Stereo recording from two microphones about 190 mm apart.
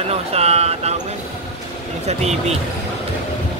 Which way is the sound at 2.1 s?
35° right (ahead or behind).